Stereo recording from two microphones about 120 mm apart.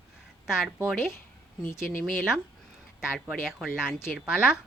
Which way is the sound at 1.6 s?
15° left (ahead or behind).